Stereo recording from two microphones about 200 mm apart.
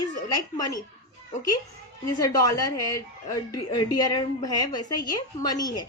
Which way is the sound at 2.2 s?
20° left (ahead or behind).